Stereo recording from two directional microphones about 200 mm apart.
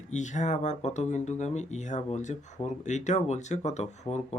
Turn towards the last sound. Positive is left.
turn(degrees=35)  # may be behind; listen again after turning